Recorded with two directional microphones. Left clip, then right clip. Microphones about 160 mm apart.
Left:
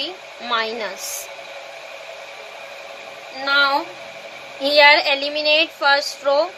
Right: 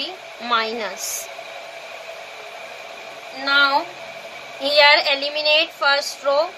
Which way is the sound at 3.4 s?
35° left (ahead or behind).